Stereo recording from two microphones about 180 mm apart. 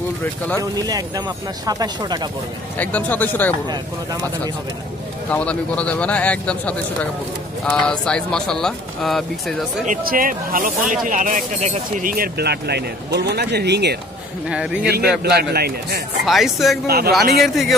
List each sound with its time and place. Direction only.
0.6 s speech: 20° right (ahead or behind)
2.8 s a man's voice: 10° left (ahead or behind)
5.3 s a man's voice: 5° left (ahead or behind)
9.8 s speech: 50° right (ahead or behind); by 13.9 s 70° right (ahead or behind)
14.5 s speech: 5° right (ahead or behind)
14.9 s speech: 65° right (ahead or behind)
16.3 s speech: centre (ahead or behind)
16.8 s speech: 60° right (ahead or behind)